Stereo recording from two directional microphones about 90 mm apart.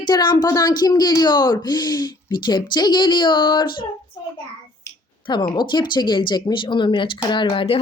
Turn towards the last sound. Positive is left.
turn(degrees=85)